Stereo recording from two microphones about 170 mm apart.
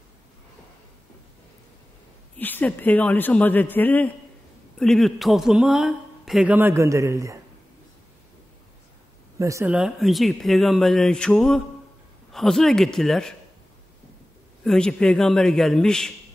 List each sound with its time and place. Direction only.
2.3 s a man's voice: 10° left (ahead or behind); by 7.3 s 20° right (ahead or behind)
9.4 s speech: 20° right (ahead or behind)
9.7 s a man's voice: 5° right (ahead or behind)
14.6 s a man's voice: 5° left (ahead or behind)